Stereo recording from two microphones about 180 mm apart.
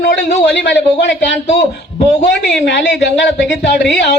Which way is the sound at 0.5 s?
75° left (ahead or behind).